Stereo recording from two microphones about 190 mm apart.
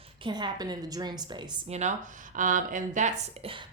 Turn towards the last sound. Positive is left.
turn(degrees=-35)  # may be behind; listen again after turning